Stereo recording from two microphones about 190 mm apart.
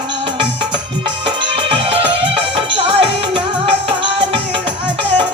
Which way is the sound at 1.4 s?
30° right (ahead or behind).